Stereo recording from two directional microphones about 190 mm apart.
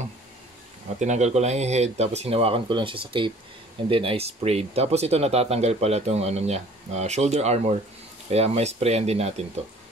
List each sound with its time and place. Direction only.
0.9 s speech: 35° right (ahead or behind)